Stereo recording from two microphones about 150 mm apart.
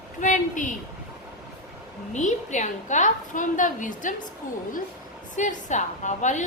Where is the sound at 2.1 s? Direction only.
55° left (ahead or behind).